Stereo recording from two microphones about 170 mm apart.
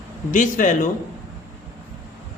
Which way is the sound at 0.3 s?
50° left (ahead or behind).